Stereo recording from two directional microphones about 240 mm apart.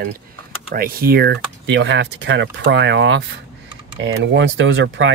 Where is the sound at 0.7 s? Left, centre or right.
Right.